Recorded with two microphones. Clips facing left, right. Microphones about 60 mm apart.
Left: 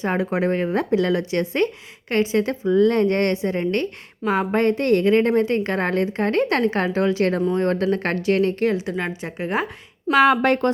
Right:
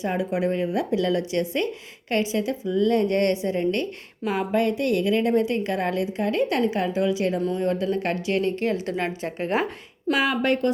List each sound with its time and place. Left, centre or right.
0.2 s a woman's voice: left
8.7 s a woman's voice: left
10.1 s a woman's voice: left
10.4 s speech: left